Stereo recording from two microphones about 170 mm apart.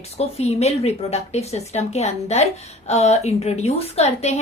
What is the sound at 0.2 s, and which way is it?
A woman's voice, 40° left (ahead or behind).